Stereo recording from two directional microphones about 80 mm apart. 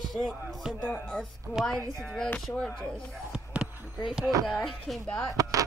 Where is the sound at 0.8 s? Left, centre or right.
Centre.